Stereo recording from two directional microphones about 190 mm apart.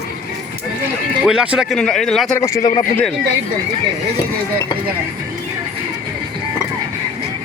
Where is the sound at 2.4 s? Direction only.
15° left (ahead or behind).